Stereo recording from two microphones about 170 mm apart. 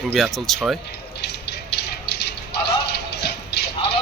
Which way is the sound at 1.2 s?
80° left.